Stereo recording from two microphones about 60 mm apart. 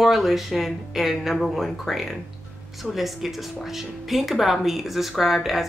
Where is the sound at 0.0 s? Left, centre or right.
Centre.